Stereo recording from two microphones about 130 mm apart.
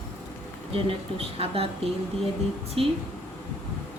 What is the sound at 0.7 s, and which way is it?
Speech, 50° right (ahead or behind).